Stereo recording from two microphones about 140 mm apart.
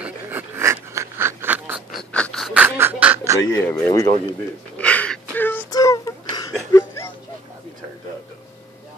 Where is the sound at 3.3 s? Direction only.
15° left (ahead or behind).